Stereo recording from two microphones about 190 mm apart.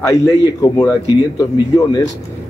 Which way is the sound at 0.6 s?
20° left (ahead or behind).